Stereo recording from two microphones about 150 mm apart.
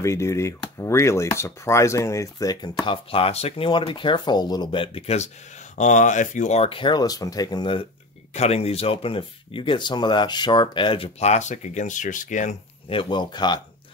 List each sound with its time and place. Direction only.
0.0 s speech: 20° left (ahead or behind)
8.3 s speech: 45° left (ahead or behind)
12.9 s speech: 30° left (ahead or behind)